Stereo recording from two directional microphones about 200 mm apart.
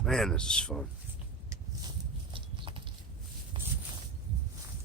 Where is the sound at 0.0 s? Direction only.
Centre (ahead or behind).